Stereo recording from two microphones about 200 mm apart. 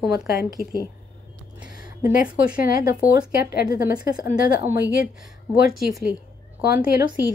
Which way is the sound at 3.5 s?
45° left (ahead or behind).